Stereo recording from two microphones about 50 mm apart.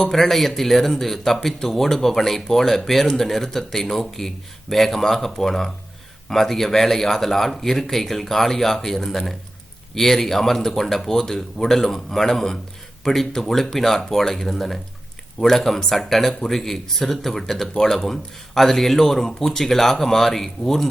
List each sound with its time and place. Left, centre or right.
0.0 s speech: centre